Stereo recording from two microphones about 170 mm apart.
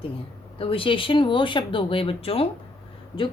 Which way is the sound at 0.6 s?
30° left (ahead or behind).